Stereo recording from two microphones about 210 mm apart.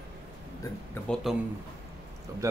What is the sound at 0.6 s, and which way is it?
Speech, 10° left (ahead or behind).